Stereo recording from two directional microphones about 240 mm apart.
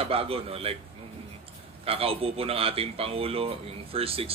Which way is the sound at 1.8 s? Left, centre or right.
Right.